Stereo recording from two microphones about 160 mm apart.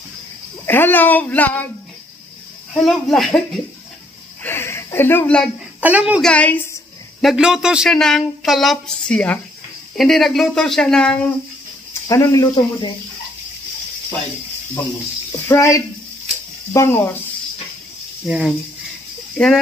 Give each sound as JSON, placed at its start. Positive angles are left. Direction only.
{"t": 0.7, "sound": "speech", "side_deg": 10}
{"t": 2.7, "sound": "speech", "side_deg": 0}
{"t": 4.4, "sound": "a sound", "side_deg": 15}
{"t": 5.8, "sound": "speech", "side_deg": -10}
{"t": 6.2, "sound": "a sound", "side_deg": 10}
{"t": 7.2, "sound": "speech", "side_deg": -5}
{"t": 11.9, "sound": "speech", "side_deg": 20}
{"t": 15.4, "sound": "speech", "side_deg": 15}
{"t": 18.2, "sound": "speech", "side_deg": 0}